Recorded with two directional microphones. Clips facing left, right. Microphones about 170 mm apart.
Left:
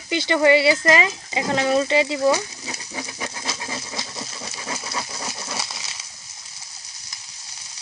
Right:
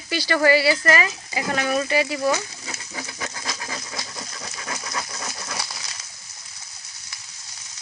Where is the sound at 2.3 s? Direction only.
20° left (ahead or behind).